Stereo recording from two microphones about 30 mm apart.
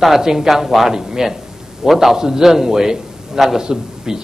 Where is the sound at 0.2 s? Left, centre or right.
Centre.